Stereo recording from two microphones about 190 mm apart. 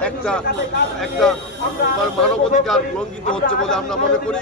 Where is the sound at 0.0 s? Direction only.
5° left (ahead or behind).